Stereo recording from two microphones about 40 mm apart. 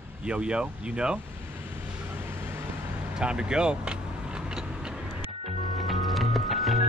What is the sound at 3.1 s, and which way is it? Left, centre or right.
Vehicle, right.